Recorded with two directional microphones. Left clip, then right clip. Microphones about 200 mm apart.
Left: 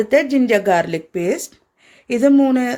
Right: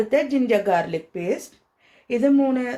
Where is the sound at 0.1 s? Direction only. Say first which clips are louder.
Left 7 dB; 40° left (ahead or behind).